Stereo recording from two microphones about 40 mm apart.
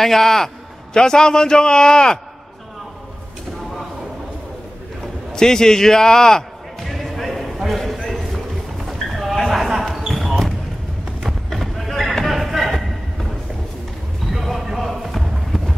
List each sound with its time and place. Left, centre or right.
0.0 s a man's voice: centre
5.3 s a man's voice: centre
6.8 s basketball bounce: centre
7.6 s a sound: centre
9.5 s basketball bounce: centre
11.1 s run: centre
12.2 s a sound: centre
14.3 s basketball bounce: centre